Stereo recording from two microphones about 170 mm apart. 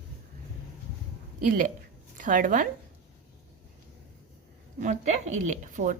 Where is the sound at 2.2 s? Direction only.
50° right (ahead or behind).